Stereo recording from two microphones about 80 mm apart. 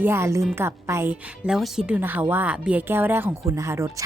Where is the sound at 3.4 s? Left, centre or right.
Right.